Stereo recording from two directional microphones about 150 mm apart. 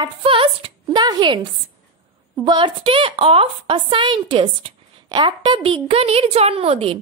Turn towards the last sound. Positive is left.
turn(degrees=-40)  # may be behind; listen again after turning